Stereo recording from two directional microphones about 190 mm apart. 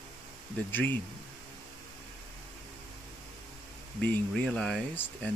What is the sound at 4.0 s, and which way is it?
Speech, 5° left (ahead or behind).